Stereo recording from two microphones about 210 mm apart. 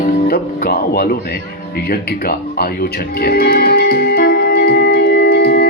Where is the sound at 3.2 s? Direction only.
45° left (ahead or behind).